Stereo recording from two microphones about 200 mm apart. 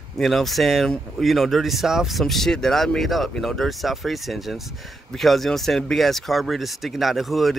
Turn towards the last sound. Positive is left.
turn(degrees=0)  # may be behind; listen again after turning